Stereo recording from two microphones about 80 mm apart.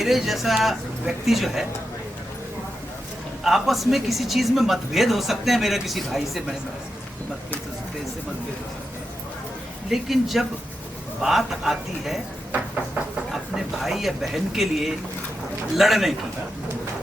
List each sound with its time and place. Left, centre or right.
0.0 s speech: centre
3.4 s speech: centre
9.9 s speech: centre
12.5 s a sound: centre
13.8 s speech: centre